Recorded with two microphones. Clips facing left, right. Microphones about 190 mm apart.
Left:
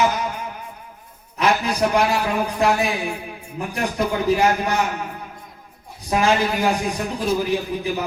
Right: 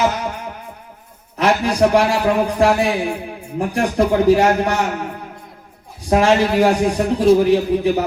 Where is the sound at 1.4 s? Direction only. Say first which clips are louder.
Right 4 dB; 70° right (ahead or behind).